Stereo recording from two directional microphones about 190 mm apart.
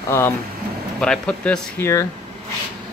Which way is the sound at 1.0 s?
5° left (ahead or behind).